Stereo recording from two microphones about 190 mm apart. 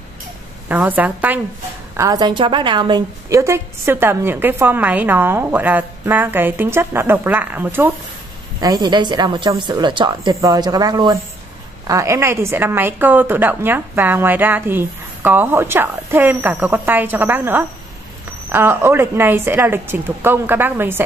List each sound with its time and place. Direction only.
0.7 s a woman's voice: 10° right (ahead or behind)
2.0 s a woman's voice: 20° right (ahead or behind)
8.5 s a woman's voice: 20° right (ahead or behind)